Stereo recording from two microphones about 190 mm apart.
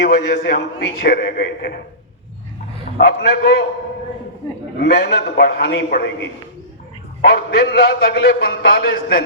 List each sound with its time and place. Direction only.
0.0 s a man's voice: 65° left (ahead or behind)
3.0 s a man's voice: 65° left (ahead or behind)
4.8 s a man's voice: 60° left (ahead or behind)
7.2 s a man's voice: 60° left (ahead or behind)